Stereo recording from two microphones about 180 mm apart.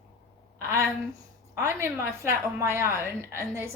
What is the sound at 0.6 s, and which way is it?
A woman's voice, 15° right (ahead or behind).